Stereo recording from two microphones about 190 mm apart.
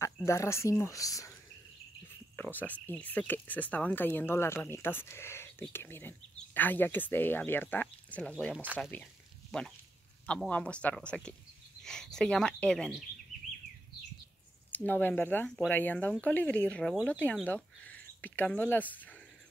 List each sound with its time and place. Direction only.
0.0 s speech: 15° left (ahead or behind)
2.3 s speech: 10° left (ahead or behind)
8.9 s a sound: 5° left (ahead or behind)
10.2 s speech: 5° left (ahead or behind)
14.7 s speech: 10° left (ahead or behind)